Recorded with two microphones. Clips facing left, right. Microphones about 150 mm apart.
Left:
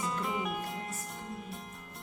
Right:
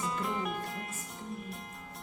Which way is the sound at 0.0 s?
Centre (ahead or behind).